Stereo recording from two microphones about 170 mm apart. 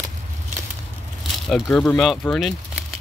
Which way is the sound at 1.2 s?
Centre (ahead or behind).